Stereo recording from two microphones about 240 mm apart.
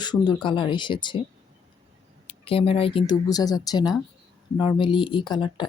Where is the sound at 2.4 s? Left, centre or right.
Left.